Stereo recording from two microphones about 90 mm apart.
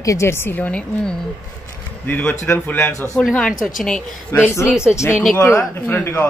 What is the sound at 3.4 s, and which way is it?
Speech, 5° left (ahead or behind).